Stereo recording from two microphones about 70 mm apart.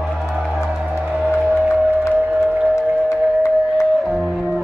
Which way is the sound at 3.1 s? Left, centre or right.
Left.